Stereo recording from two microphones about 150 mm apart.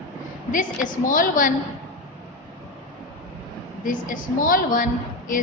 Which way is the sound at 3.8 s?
65° left (ahead or behind).